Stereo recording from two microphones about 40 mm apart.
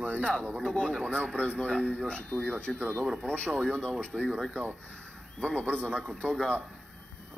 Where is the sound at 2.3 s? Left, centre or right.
Centre.